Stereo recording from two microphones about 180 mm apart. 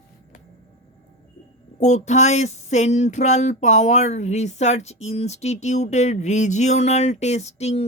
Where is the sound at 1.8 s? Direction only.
40° left (ahead or behind).